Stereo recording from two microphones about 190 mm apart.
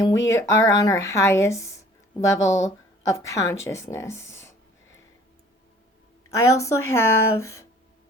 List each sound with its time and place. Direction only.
0.0 s speech: 15° left (ahead or behind)
6.3 s speech: 15° left (ahead or behind)